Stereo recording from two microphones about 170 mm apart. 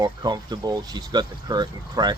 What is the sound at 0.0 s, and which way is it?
Speech, 25° right (ahead or behind).